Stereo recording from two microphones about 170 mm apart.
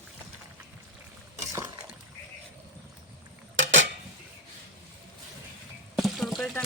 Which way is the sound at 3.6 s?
90° right.